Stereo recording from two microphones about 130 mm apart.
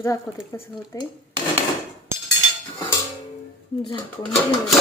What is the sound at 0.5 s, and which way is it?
Speech, 25° left (ahead or behind).